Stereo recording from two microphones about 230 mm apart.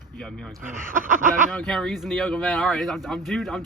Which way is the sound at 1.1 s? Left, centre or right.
Right.